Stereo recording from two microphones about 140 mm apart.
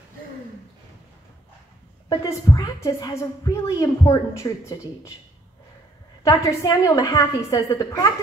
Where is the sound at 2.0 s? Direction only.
25° left (ahead or behind).